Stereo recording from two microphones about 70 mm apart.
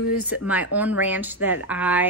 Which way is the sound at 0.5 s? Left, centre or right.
Right.